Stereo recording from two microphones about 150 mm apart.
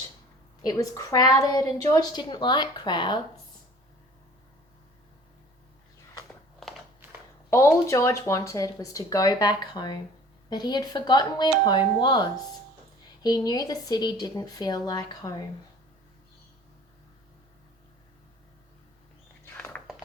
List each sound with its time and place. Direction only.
0.6 s speech: 25° left (ahead or behind)
7.5 s speech: 20° left (ahead or behind)
19.5 s a sound: 10° left (ahead or behind)